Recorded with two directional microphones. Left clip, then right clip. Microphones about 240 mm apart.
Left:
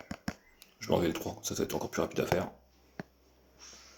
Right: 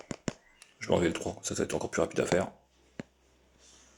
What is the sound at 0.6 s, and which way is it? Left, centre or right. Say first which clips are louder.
Speech: right 2 dB; right.